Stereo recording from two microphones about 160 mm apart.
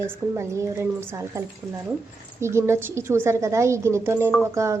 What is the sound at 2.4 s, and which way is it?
A woman's voice, 15° right (ahead or behind).